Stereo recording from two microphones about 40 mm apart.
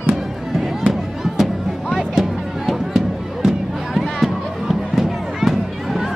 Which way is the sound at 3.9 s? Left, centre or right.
Centre.